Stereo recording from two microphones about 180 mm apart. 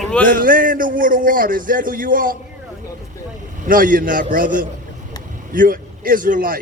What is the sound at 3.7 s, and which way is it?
A man's voice, 50° right (ahead or behind).